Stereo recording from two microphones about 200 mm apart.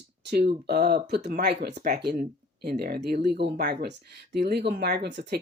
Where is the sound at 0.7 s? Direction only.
55° right (ahead or behind).